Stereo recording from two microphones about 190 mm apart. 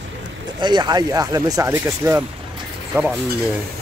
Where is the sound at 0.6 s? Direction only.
20° right (ahead or behind).